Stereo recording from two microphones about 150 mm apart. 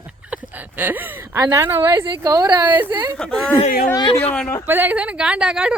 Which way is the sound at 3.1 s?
5° left (ahead or behind).